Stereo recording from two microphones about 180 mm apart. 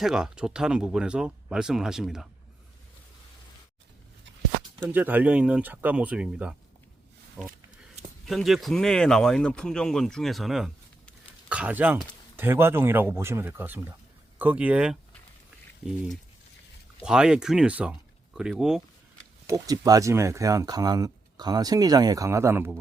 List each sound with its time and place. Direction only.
0.0 s speech: 5° right (ahead or behind)
4.9 s speech: 10° right (ahead or behind)
7.4 s speech: 5° left (ahead or behind)
17.0 s speech: 5° right (ahead or behind)
19.5 s speech: 20° right (ahead or behind)